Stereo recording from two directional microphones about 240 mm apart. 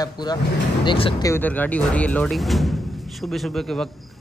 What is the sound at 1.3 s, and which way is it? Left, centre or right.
Speech, centre.